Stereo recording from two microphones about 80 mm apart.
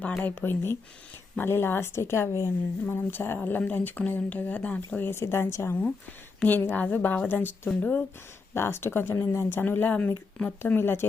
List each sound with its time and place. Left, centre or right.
0.2 s a woman's voice: left
6.4 s speech: left
8.5 s a woman's voice: left
10.7 s speech: left